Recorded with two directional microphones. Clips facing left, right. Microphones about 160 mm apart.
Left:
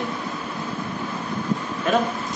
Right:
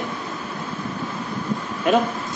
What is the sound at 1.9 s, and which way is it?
Speech, 15° right (ahead or behind).